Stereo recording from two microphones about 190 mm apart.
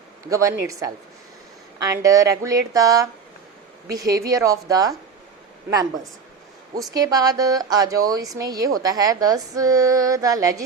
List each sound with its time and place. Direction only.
0.3 s speech: 15° right (ahead or behind)
4.1 s a woman's voice: 15° right (ahead or behind)
6.9 s a woman's voice: 20° right (ahead or behind)